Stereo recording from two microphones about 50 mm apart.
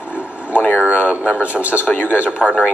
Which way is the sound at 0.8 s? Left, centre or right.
Right.